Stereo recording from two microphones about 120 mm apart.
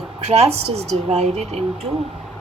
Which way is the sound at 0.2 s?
60° right (ahead or behind).